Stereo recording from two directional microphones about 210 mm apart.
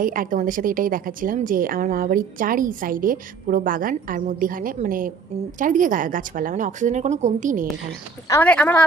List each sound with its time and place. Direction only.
0.0 s a woman's voice: 40° right (ahead or behind)
8.3 s speech: 5° left (ahead or behind)